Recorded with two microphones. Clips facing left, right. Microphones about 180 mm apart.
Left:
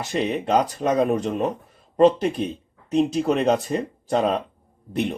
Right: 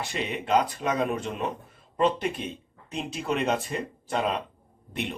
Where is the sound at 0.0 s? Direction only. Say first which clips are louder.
Left 7 dB; 40° left (ahead or behind).